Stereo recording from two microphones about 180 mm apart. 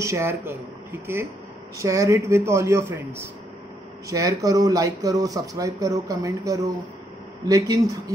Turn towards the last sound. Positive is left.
turn(degrees=-20)  # may be behind; listen again after turning